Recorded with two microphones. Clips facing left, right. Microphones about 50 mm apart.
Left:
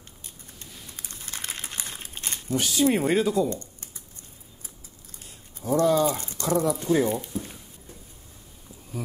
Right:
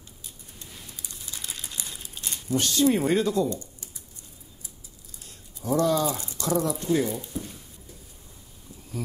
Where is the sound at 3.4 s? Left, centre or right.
Left.